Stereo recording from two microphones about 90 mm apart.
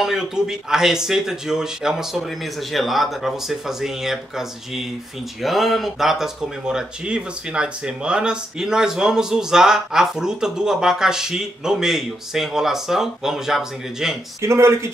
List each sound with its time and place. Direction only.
0.0 s speech: 5° right (ahead or behind)
14.4 s speech: 30° right (ahead or behind)